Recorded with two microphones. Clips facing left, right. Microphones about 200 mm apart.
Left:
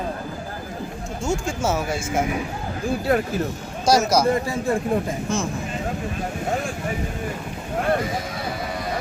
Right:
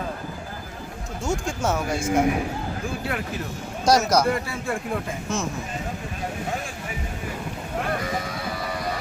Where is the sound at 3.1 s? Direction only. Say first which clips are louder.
Left 12 dB; 40° left (ahead or behind).